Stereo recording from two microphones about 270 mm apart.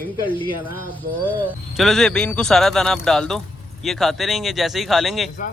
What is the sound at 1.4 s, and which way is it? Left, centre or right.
Speech, centre.